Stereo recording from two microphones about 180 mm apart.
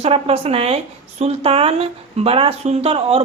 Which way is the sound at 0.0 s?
35° right (ahead or behind).